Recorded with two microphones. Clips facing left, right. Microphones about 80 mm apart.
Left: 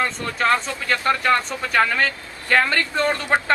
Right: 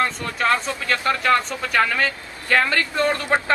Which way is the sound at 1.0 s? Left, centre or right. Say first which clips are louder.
Even; centre.